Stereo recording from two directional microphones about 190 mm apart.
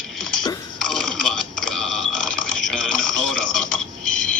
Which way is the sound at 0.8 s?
Centre (ahead or behind).